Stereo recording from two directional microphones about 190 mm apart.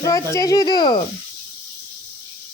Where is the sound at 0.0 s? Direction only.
15° left (ahead or behind).